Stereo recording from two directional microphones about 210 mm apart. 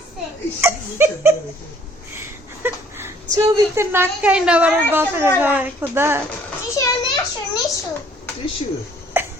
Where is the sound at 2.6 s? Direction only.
10° right (ahead or behind).